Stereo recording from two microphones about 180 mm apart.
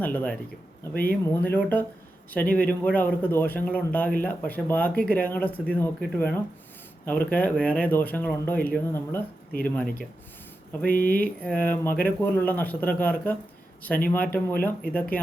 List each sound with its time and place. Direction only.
0.0 s speech: 10° left (ahead or behind)
10.8 s speech: 50° left (ahead or behind)
11.2 s speech: 10° left (ahead or behind)